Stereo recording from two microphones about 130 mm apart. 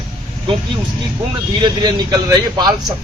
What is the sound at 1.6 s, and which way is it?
A man's voice, 35° right (ahead or behind).